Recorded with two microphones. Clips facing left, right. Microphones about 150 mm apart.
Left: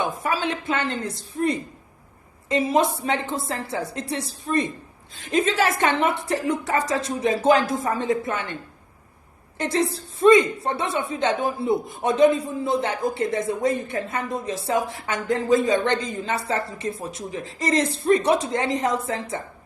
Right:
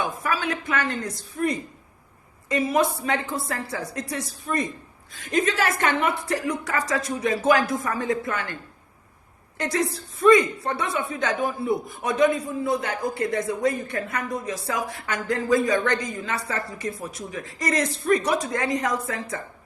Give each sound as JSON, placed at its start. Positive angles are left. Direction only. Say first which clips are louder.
{"t": 0.0, "sound": "a man's voice", "louder": "left 2 dB", "side_deg": 25}
{"t": 9.6, "sound": "a man's voice", "louder": "left 2 dB", "side_deg": 25}